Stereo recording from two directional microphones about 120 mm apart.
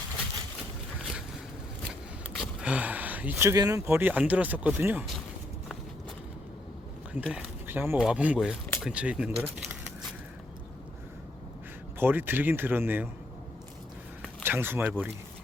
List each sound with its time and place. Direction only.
1.9 s power windows: centre (ahead or behind)
2.6 s a sound: 10° right (ahead or behind)
3.6 s speech: 30° right (ahead or behind)
7.1 s speech: 10° right (ahead or behind)
11.9 s speech: 15° right (ahead or behind)
14.4 s speech: 20° right (ahead or behind)